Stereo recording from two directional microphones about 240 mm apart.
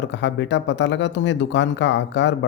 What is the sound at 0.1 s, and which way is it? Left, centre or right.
Speech, left.